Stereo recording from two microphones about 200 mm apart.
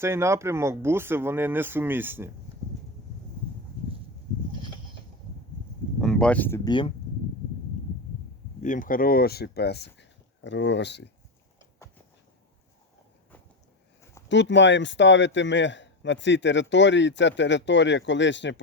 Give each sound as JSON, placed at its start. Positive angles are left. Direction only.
{"t": 0.0, "sound": "speech", "side_deg": -15}
{"t": 6.0, "sound": "a sound", "side_deg": 5}
{"t": 6.7, "sound": "speech", "side_deg": 25}
{"t": 8.6, "sound": "speech", "side_deg": 40}
{"t": 14.0, "sound": "a sound", "side_deg": 15}
{"t": 14.3, "sound": "speech", "side_deg": 65}